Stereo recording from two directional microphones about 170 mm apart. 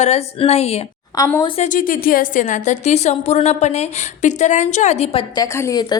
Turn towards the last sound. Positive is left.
turn(degrees=20)  # may be behind; listen again after turning